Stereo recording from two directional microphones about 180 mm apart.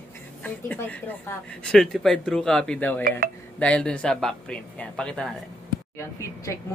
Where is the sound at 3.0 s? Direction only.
55° right (ahead or behind).